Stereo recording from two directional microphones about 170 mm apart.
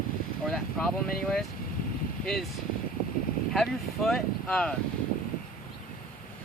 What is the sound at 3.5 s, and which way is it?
Speech, 5° left (ahead or behind).